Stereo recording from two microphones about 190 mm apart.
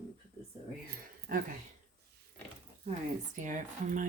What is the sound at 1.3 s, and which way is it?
Speech, 50° right (ahead or behind).